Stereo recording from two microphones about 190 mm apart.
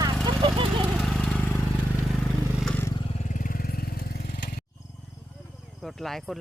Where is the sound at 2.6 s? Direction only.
10° left (ahead or behind).